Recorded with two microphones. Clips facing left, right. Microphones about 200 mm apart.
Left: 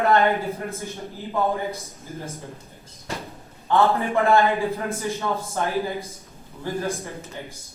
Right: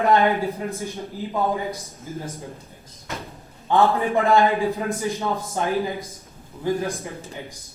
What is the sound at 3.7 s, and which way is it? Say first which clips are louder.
Speech: right 1 dB; 15° right (ahead or behind).